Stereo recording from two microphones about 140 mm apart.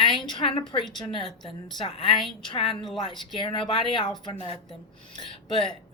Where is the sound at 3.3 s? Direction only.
35° left (ahead or behind).